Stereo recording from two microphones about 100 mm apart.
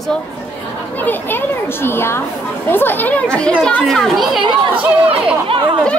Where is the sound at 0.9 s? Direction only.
20° left (ahead or behind); by 4.4 s centre (ahead or behind).